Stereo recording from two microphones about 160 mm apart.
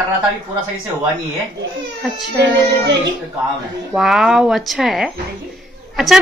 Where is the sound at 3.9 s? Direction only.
5° right (ahead or behind).